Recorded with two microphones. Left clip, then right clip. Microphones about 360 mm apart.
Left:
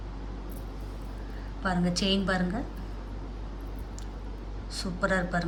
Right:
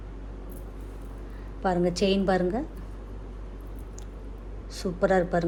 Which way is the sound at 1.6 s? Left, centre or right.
Centre.